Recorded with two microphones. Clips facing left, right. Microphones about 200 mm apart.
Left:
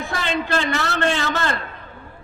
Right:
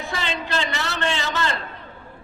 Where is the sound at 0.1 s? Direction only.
50° left (ahead or behind).